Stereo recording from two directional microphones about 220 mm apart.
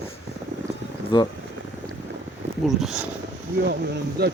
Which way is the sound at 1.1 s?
20° left (ahead or behind).